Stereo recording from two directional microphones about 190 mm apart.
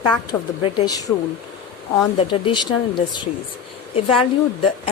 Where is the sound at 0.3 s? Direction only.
25° left (ahead or behind).